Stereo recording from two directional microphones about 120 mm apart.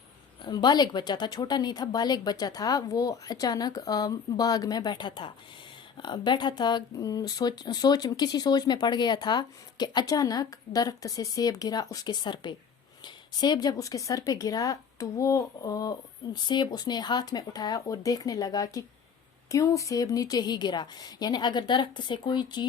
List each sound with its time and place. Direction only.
0.4 s speech: 35° left (ahead or behind)